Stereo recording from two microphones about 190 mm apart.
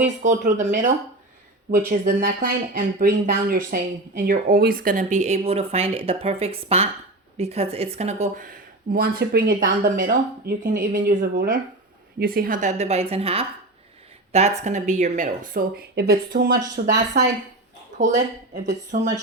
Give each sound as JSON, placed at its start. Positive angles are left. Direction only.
{"t": 0.0, "sound": "speech", "side_deg": -40}
{"t": 16.5, "sound": "speech", "side_deg": -20}
{"t": 16.7, "sound": "speech", "side_deg": -65}
{"t": 17.9, "sound": "speech", "side_deg": -40}